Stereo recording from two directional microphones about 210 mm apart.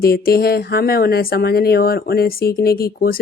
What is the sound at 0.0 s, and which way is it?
Speech, 45° left (ahead or behind).